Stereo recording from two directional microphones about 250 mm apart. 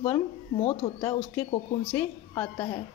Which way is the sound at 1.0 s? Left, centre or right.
Centre.